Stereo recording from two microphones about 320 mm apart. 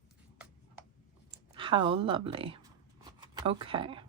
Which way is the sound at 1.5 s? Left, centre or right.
Centre.